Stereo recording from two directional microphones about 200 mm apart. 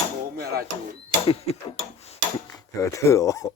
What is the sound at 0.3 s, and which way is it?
Dishes, 50° right (ahead or behind).